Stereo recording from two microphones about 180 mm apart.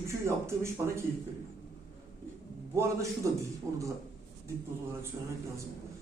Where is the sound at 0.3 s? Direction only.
15° right (ahead or behind).